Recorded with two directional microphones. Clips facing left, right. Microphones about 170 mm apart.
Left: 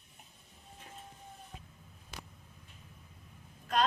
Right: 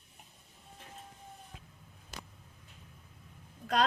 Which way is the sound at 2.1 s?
Centre (ahead or behind).